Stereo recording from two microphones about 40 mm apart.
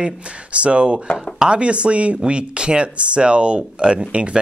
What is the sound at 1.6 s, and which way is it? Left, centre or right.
Speech, right.